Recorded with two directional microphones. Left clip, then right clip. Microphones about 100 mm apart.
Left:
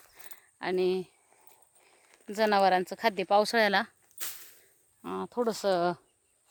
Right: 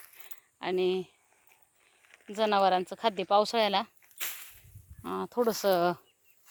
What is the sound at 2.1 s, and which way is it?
Speech, 25° left (ahead or behind).